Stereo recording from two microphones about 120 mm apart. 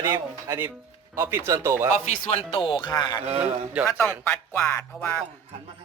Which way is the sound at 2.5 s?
45° left (ahead or behind).